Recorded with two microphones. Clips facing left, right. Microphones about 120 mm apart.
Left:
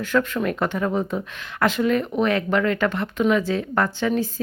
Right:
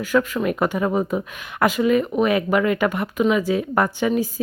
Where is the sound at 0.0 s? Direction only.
5° right (ahead or behind).